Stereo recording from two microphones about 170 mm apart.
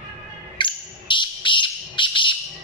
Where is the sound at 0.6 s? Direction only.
30° left (ahead or behind).